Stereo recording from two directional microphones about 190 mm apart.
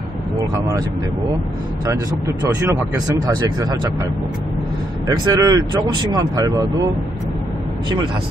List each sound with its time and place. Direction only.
0.6 s speech: 20° right (ahead or behind)
1.9 s speech: 15° right (ahead or behind)
5.0 s speech: 20° right (ahead or behind)